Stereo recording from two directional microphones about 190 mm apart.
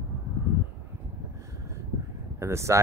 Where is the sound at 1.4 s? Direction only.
15° right (ahead or behind).